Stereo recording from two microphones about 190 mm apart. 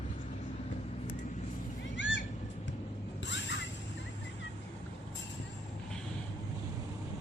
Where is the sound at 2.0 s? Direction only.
75° left (ahead or behind).